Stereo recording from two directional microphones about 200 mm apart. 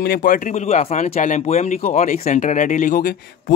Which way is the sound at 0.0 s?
45° left (ahead or behind).